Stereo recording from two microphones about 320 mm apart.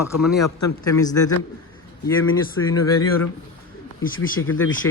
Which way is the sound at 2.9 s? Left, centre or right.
Left.